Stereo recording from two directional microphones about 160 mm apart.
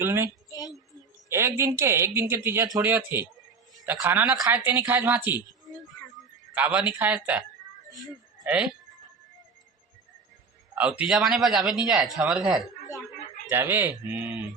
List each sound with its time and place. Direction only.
0.0 s speech: 15° right (ahead or behind)
0.3 s a sound: 20° left (ahead or behind)
1.3 s speech: 15° right (ahead or behind)
6.5 s speech: 10° right (ahead or behind)
8.4 s speech: 5° right (ahead or behind)
10.8 s a man's voice: 10° right (ahead or behind)
13.5 s speech: 15° right (ahead or behind)